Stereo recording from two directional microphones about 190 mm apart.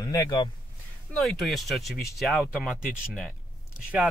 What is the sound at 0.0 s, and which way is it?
Speech, 15° left (ahead or behind).